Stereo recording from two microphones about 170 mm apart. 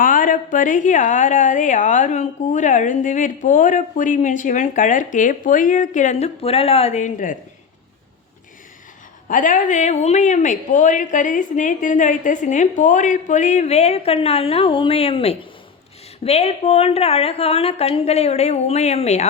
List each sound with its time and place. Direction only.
0.0 s a woman's voice: 55° left (ahead or behind)
9.3 s a woman's voice: 50° left (ahead or behind)